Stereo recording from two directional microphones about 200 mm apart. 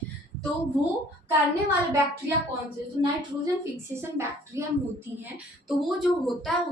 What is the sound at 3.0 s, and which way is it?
Speech, 20° right (ahead or behind).